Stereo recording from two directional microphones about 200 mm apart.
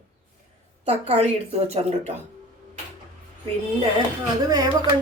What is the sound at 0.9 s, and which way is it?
A woman's voice, 30° right (ahead or behind).